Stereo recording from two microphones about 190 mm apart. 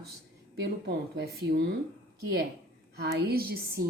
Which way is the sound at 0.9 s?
60° right (ahead or behind).